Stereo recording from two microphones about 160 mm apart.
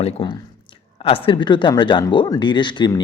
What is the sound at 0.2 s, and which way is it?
Speech, 35° left (ahead or behind).